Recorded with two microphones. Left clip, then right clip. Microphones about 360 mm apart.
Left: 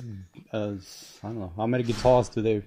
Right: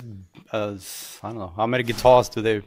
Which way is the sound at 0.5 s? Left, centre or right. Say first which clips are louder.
Right 5 dB; right.